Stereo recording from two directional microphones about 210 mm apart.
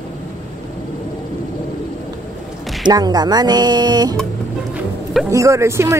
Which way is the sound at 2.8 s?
20° right (ahead or behind).